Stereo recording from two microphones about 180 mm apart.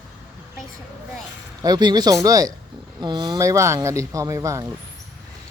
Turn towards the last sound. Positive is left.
turn(degrees=-15)  # may be behind; listen again after turning